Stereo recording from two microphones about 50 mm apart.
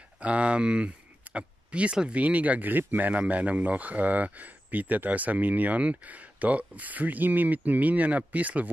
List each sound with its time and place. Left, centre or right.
0.2 s speech: right